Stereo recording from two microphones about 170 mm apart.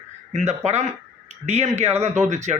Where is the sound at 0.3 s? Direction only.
40° right (ahead or behind).